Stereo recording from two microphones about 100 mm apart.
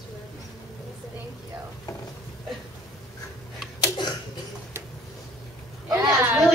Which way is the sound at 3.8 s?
45° left (ahead or behind).